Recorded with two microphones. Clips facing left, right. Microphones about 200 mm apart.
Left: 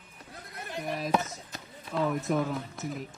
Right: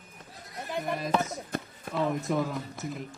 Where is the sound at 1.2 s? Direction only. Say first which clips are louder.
Right 7 dB; 55° right (ahead or behind).